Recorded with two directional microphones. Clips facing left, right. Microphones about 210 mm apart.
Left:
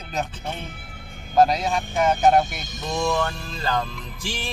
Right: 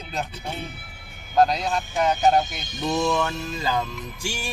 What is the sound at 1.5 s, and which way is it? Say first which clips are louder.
Speech: left 2 dB; 5° left (ahead or behind).